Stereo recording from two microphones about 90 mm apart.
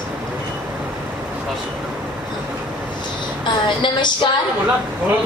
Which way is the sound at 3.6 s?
60° left (ahead or behind).